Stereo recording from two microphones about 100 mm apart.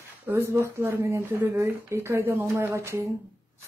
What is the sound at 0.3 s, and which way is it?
Speech, 25° right (ahead or behind).